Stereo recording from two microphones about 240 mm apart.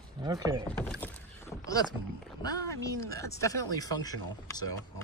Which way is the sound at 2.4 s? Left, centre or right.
Centre.